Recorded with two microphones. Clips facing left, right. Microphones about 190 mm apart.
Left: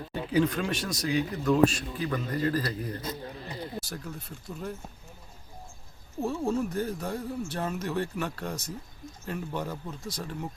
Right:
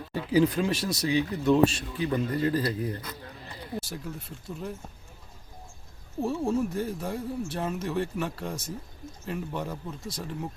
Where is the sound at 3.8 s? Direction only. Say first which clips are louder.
Right 1 dB; 5° right (ahead or behind).